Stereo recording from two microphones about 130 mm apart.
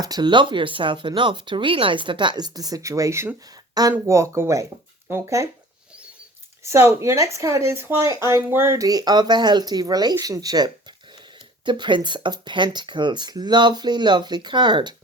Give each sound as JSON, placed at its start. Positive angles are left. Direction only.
{"t": 0.0, "sound": "speech", "side_deg": -30}
{"t": 6.6, "sound": "speech", "side_deg": -20}